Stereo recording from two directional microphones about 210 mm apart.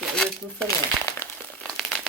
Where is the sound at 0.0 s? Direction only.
5° left (ahead or behind).